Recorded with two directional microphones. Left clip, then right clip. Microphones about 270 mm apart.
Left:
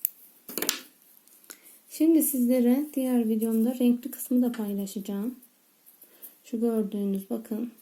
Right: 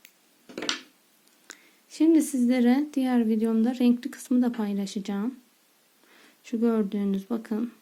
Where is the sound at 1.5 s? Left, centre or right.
Centre.